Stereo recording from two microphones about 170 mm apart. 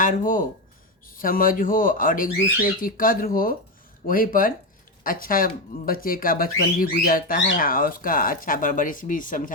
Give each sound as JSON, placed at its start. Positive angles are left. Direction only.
{"t": 0.0, "sound": "speech", "side_deg": 50}